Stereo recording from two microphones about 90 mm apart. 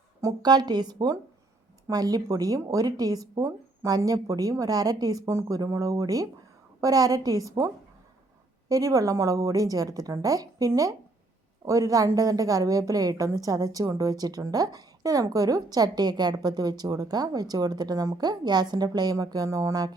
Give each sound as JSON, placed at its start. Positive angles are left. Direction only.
{"t": 0.4, "sound": "a woman's voice", "side_deg": -50}
{"t": 8.7, "sound": "a woman's voice", "side_deg": -40}